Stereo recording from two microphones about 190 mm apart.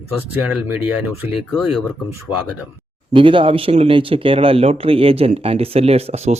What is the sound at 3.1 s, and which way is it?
Speech, 25° right (ahead or behind).